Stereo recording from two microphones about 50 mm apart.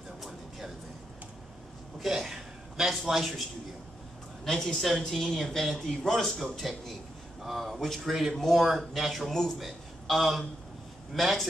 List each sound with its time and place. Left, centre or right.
2.0 s a man's voice: centre
4.5 s a man's voice: centre